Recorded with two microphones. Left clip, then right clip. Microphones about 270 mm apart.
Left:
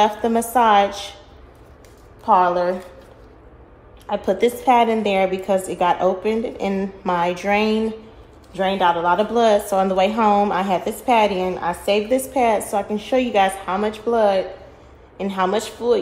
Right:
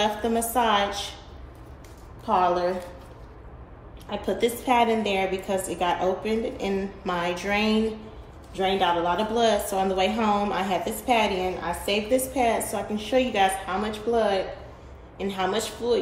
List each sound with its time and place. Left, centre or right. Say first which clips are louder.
0.0 s a woman's voice: left 7 dB; left
2.2 s a woman's voice: left 6 dB; left
4.1 s a woman's voice: left 7 dB; left